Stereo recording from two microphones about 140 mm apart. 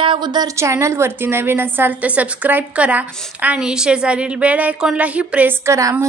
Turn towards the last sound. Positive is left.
turn(degrees=-20)  # may be behind; listen again after turning